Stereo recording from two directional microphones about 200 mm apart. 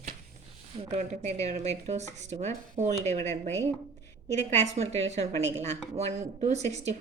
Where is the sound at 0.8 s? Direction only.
35° right (ahead or behind).